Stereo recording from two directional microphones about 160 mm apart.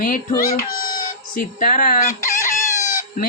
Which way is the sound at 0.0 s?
55° left (ahead or behind).